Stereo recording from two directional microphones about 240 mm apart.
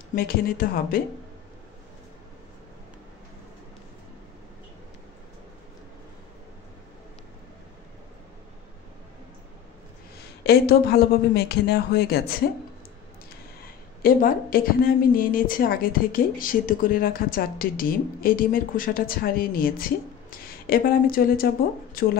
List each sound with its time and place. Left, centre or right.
0.1 s a woman's voice: left
10.4 s a woman's voice: left
14.0 s a woman's voice: left